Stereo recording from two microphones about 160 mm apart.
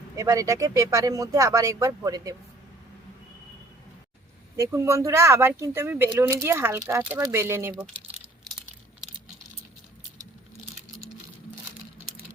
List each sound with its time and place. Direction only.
0.2 s speech: 20° right (ahead or behind)
4.5 s speech: 20° right (ahead or behind)